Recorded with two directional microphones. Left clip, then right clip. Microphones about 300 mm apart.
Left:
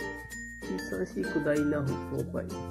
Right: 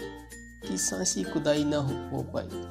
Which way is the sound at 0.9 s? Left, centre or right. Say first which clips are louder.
Even; right.